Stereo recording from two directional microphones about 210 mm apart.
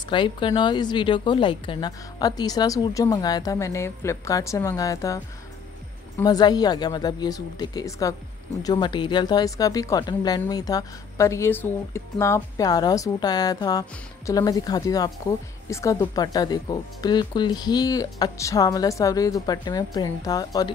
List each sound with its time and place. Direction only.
0.1 s a woman's voice: 25° left (ahead or behind)